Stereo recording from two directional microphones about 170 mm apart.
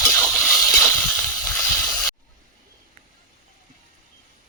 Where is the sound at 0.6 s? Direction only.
20° left (ahead or behind).